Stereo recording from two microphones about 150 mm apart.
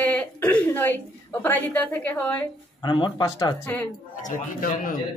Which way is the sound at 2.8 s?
30° left (ahead or behind).